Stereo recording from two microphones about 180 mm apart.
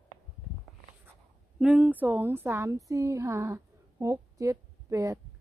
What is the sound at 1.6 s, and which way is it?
A woman's voice, 5° right (ahead or behind).